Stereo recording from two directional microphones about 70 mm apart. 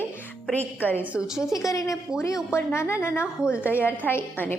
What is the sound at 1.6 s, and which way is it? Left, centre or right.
A woman's voice, left.